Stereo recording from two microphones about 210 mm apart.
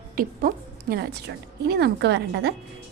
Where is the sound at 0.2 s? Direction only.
45° right (ahead or behind).